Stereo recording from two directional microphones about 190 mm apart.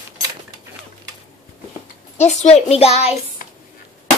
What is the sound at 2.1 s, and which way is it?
Speech, 35° left (ahead or behind).